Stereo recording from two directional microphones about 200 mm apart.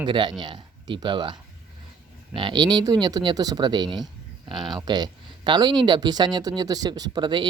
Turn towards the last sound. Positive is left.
turn(degrees=-20)  # may be behind; listen again after turning